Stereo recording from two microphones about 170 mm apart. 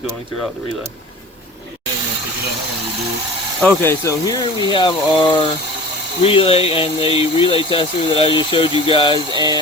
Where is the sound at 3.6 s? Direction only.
10° left (ahead or behind).